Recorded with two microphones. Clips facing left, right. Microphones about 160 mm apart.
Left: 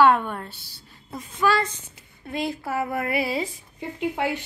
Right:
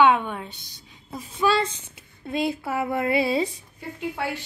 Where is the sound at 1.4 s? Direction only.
25° right (ahead or behind).